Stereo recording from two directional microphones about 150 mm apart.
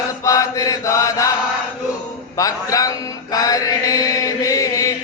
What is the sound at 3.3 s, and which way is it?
Chant, 25° left (ahead or behind).